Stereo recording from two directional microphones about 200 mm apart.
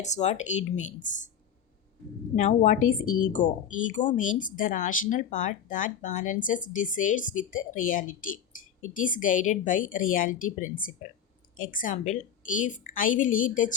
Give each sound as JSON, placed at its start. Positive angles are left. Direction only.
{"t": 0.0, "sound": "a woman's voice", "side_deg": 35}
{"t": 2.3, "sound": "a woman's voice", "side_deg": 35}